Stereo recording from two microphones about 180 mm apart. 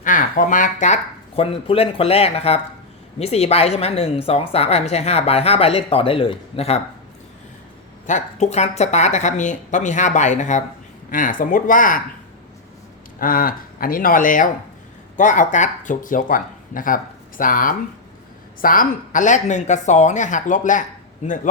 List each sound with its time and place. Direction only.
0.0 s speech: 45° left (ahead or behind)
1.4 s a woman's voice: 30° left (ahead or behind)
8.0 s a woman's voice: 40° left (ahead or behind)
13.1 s speech: 50° left (ahead or behind)